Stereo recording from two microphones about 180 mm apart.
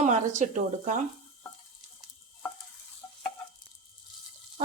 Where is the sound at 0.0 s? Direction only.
40° right (ahead or behind).